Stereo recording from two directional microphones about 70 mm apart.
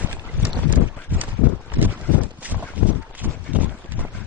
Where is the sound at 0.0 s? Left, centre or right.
Right.